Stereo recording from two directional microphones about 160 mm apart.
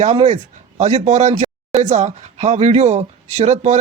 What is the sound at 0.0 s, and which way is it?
Speech, 40° right (ahead or behind).